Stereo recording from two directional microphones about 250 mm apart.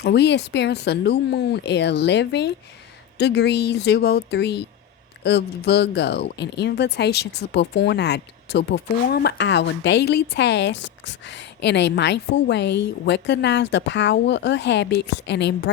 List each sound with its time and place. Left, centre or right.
0.0 s a woman's voice: left